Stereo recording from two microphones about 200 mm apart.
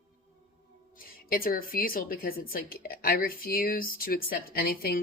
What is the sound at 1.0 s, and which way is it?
A woman's voice, 45° left (ahead or behind).